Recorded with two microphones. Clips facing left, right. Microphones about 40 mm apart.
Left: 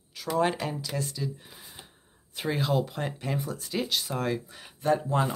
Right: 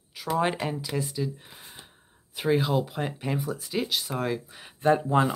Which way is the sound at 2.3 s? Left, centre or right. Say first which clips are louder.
Right 3 dB; centre.